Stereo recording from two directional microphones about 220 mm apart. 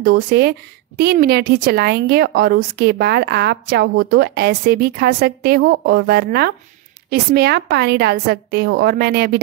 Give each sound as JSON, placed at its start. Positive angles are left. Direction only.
{"t": 0.0, "sound": "a woman's voice", "side_deg": -45}